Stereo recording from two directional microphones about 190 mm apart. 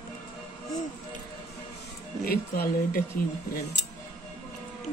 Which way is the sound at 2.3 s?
55° left (ahead or behind).